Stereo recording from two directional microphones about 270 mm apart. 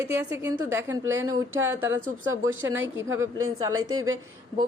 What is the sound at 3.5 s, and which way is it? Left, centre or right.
Speech, centre.